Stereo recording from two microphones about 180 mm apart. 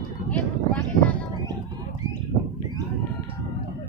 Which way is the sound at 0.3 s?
10° left (ahead or behind).